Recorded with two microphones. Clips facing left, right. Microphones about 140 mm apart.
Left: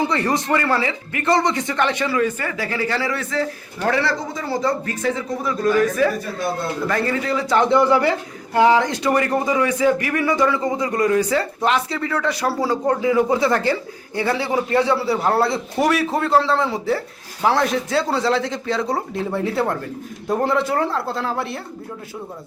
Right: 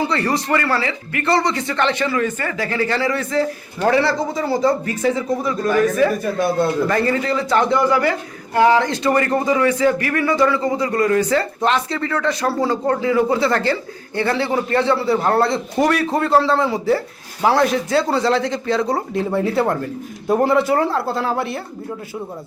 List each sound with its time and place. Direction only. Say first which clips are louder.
0.0 s speech: even; 20° left (ahead or behind)
3.8 s speech: right 4 dB; 15° right (ahead or behind)
6.8 s a man's voice: right 3 dB; centre (ahead or behind)
7.7 s a man's voice: left 1 dB; 25° left (ahead or behind); by 21.6 s centre (ahead or behind)